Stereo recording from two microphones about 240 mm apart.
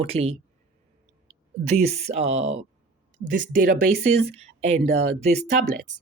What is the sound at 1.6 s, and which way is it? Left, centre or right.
Speech, right.